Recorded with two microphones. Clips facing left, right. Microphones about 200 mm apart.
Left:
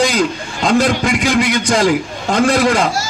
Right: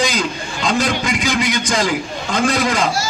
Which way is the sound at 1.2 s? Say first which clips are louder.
Left 4 dB; 55° left (ahead or behind).